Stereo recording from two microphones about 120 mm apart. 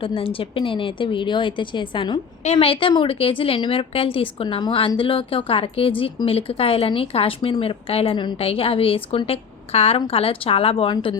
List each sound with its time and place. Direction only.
0.0 s speech: 50° left (ahead or behind)
2.4 s a woman's voice: 60° left (ahead or behind)
10.9 s speech: 35° left (ahead or behind)